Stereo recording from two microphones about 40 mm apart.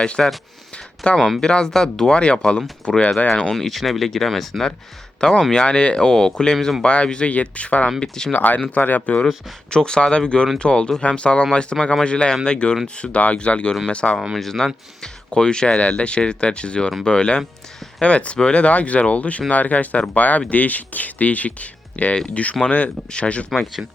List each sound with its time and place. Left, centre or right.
0.2 s speech: centre
1.0 s speech: left
2.1 s speech: left
3.5 s speech: centre
5.6 s speech: left
6.8 s speech: left
7.9 s speech: centre
8.3 s speech: left
9.2 s speech: centre
14.3 s speech: centre
15.3 s speech: left
23.8 s speech: right